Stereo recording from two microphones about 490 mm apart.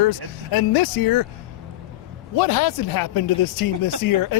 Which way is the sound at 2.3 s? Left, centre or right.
Left.